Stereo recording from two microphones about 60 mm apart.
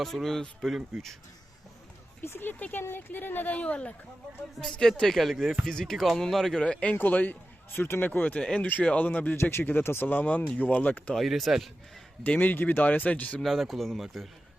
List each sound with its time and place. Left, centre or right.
0.0 s speech: centre
2.2 s a man's voice: left
4.5 s speech: centre
6.7 s speech: centre
6.9 s a man's voice: left
8.2 s speech: left
9.0 s speech: left
9.4 s a man's voice: left
10.1 s speech: left
11.1 s speech: centre
12.2 s speech: left
13.4 s speech: centre